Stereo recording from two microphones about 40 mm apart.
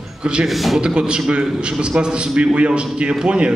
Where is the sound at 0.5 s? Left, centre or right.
Centre.